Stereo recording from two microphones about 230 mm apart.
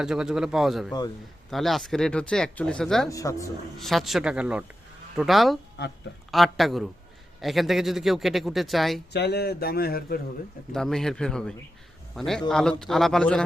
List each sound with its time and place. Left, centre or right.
0.0 s speech: centre
3.1 s speech: centre
3.8 s speech: centre
9.1 s speech: left
10.7 s speech: centre